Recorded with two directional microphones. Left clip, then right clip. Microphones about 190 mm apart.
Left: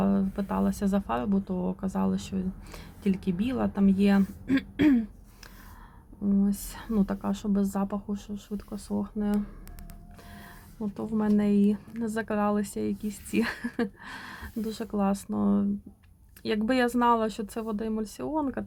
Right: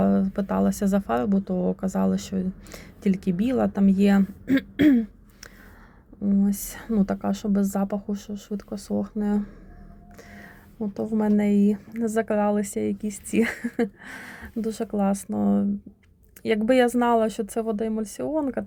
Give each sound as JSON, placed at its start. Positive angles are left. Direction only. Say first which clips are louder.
{"t": 0.0, "sound": "speech", "louder": "right 5 dB", "side_deg": -20}
{"t": 10.9, "sound": "speech", "louder": "right 4 dB", "side_deg": -15}